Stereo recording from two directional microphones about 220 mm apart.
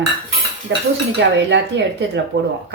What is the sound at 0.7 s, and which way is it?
Dishes, 55° right (ahead or behind).